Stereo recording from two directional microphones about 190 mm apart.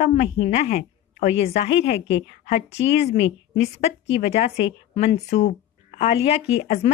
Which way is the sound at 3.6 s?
35° left (ahead or behind).